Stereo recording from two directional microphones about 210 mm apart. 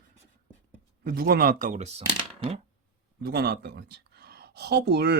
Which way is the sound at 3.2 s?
45° right (ahead or behind).